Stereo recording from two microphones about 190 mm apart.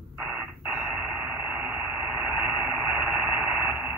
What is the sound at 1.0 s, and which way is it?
Radio, 5° right (ahead or behind).